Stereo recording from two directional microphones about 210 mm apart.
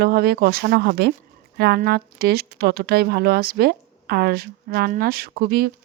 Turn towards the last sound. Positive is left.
turn(degrees=-45)  # may be behind; listen again after turning